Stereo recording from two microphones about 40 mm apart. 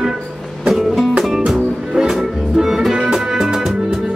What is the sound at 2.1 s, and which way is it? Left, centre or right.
Music, centre.